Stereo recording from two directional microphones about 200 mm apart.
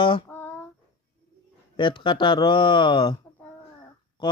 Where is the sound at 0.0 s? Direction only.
25° left (ahead or behind).